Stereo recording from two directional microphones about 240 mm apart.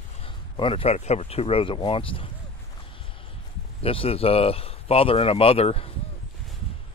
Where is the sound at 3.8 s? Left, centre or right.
Left.